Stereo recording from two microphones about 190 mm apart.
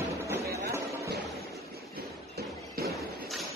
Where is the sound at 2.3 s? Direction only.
55° right (ahead or behind).